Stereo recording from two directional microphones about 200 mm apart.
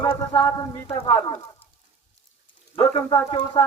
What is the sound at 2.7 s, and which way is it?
Speech, 20° left (ahead or behind).